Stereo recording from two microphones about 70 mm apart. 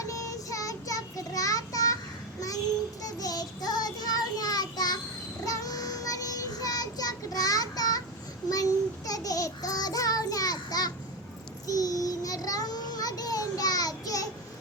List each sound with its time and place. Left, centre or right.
0.0 s child singing: left
3.0 s child singing: left
5.5 s child singing: left